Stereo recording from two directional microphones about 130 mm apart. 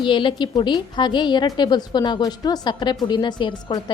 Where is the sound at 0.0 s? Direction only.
40° left (ahead or behind).